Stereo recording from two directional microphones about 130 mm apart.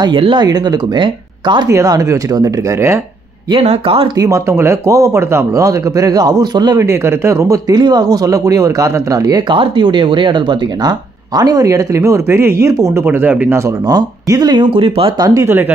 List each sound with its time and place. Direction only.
0.0 s speech: 40° right (ahead or behind)
1.7 s speech: 25° right (ahead or behind)
3.5 s speech: 50° right (ahead or behind)
4.2 s speech: 20° right (ahead or behind)
13.8 s speech: 30° right (ahead or behind)